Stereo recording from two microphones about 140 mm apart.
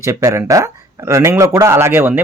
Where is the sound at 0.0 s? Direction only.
20° right (ahead or behind).